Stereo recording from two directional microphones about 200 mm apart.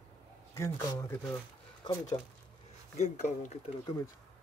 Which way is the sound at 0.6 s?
15° left (ahead or behind).